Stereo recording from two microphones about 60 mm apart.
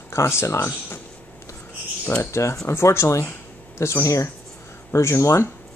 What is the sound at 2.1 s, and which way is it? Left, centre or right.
Speech, left.